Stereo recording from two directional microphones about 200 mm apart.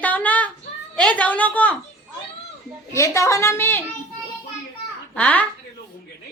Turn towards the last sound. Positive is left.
turn(degrees=5)  # may be behind; listen again after turning